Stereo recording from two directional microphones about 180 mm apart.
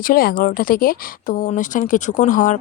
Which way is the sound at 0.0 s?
55° left (ahead or behind).